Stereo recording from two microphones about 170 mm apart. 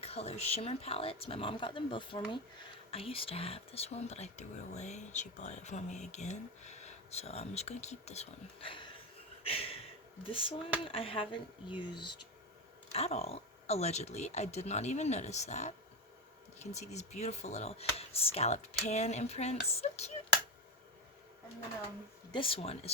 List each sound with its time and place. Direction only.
0.0 s speech: 40° left (ahead or behind)
9.4 s a sound: 35° left (ahead or behind)
10.2 s speech: 30° left (ahead or behind)
12.9 s speech: 40° left (ahead or behind)
22.3 s speech: 30° left (ahead or behind)